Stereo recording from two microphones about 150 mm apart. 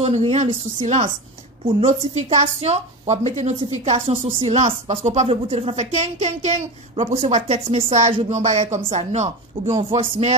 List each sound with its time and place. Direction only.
0.0 s speech: 45° right (ahead or behind)